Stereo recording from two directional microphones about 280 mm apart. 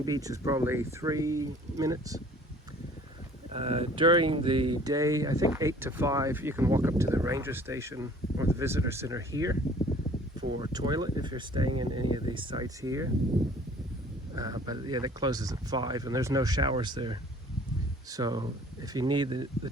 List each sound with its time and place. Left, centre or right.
0.0 s speech: centre
3.5 s speech: right
10.6 s speech: centre
14.3 s speech: centre